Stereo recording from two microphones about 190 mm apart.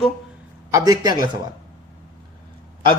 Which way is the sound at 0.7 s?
20° right (ahead or behind).